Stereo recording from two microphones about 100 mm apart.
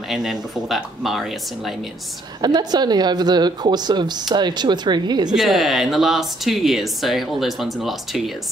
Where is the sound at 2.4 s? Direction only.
45° right (ahead or behind).